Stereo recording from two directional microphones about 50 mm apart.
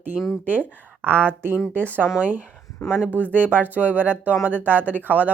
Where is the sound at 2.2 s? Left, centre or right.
Right.